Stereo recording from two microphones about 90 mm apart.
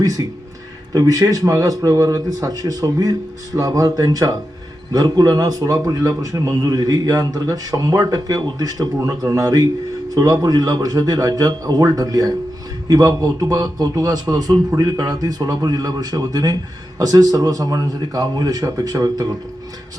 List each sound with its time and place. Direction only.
0.9 s a man's voice: 45° right (ahead or behind)